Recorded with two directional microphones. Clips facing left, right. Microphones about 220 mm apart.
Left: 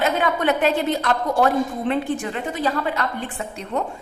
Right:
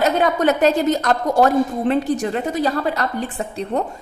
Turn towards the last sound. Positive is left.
turn(degrees=-35)  # may be behind; listen again after turning